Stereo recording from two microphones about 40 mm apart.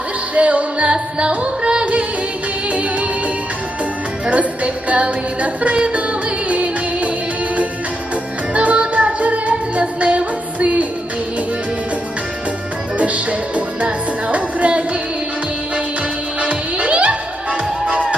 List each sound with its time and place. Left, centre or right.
0.3 s music: right
4.3 s music: right
8.5 s music: right
13.0 s music: right
14.3 s music: right
16.4 s music: right